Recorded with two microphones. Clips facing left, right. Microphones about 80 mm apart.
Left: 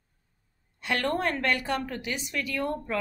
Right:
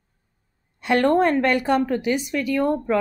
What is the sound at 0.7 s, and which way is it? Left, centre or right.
Speech, right.